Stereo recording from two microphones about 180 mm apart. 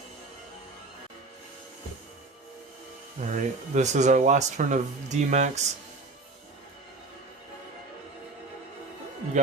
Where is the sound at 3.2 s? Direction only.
45° right (ahead or behind).